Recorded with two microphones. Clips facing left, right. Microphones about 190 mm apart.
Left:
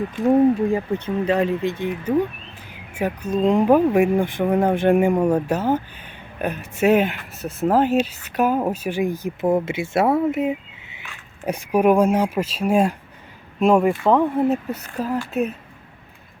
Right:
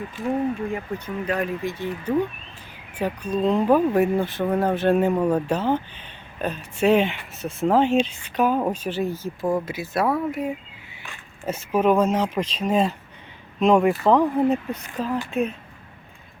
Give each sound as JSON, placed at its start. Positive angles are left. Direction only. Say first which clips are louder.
{"t": 0.7, "sound": "speech", "louder": "left 7 dB", "side_deg": 25}
{"t": 3.0, "sound": "speech", "louder": "left 3 dB", "side_deg": 15}